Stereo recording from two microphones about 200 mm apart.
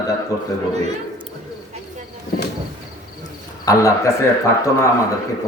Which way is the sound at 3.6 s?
15° left (ahead or behind).